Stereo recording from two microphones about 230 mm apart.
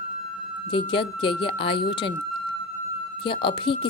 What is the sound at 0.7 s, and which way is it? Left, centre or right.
Speech, left.